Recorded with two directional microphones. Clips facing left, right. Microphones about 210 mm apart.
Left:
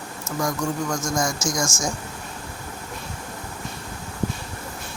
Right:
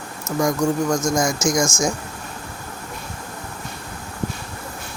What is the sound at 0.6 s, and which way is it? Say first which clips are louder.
Speech: right 6 dB; 45° right (ahead or behind).